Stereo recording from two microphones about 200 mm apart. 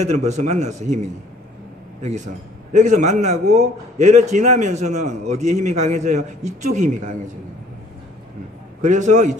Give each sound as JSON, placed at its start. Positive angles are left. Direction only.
{"t": 0.0, "sound": "a man's voice", "side_deg": -35}
{"t": 8.8, "sound": "a man's voice", "side_deg": -35}